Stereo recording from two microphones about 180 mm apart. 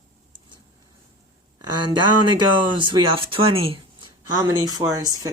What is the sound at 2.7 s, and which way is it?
Speech, 25° right (ahead or behind).